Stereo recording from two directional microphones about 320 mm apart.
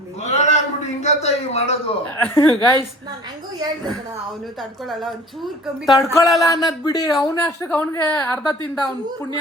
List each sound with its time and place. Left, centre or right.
0.2 s a sound: left
1.0 s a man's voice: centre
2.1 s a woman's voice: centre
4.9 s speech: centre
6.4 s a woman's voice: centre